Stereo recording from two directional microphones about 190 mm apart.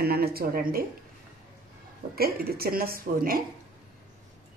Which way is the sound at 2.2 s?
50° right (ahead or behind).